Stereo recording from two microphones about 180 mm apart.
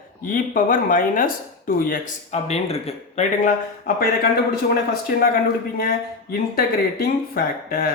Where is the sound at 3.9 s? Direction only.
50° left (ahead or behind).